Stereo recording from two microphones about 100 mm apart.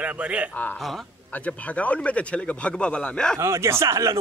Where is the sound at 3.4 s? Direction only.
25° right (ahead or behind).